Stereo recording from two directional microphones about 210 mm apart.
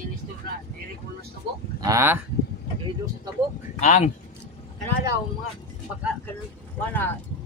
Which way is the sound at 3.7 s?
35° left (ahead or behind).